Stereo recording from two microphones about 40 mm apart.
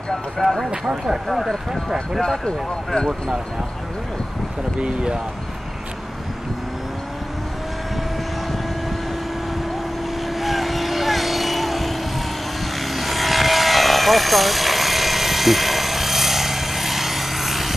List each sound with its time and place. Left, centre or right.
0.4 s speech: centre
4.7 s speech: right
10.3 s vehicle: centre